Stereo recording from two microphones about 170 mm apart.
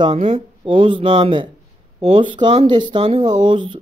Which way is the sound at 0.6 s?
30° right (ahead or behind).